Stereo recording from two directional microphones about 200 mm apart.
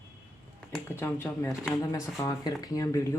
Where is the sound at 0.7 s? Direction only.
10° left (ahead or behind).